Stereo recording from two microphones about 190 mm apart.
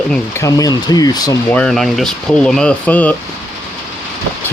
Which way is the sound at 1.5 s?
5° left (ahead or behind).